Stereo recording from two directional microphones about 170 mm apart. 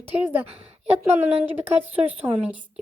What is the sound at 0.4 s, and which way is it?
Speech, 35° right (ahead or behind).